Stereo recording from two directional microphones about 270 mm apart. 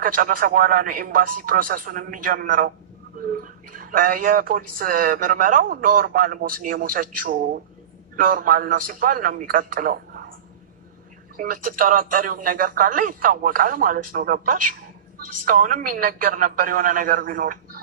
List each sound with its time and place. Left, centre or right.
0.0 s speech: right
11.3 s speech: right